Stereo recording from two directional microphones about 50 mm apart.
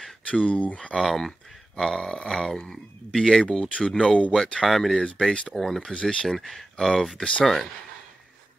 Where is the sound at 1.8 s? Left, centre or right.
Centre.